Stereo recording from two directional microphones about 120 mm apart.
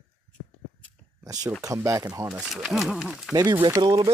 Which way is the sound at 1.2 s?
30° right (ahead or behind).